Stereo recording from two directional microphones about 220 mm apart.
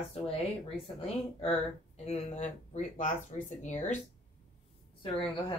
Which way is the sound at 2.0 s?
30° left (ahead or behind).